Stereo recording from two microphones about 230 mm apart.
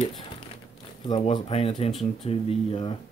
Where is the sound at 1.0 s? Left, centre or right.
Left.